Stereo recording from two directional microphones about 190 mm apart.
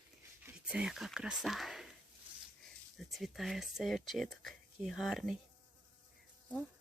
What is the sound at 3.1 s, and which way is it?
Speech, centre (ahead or behind).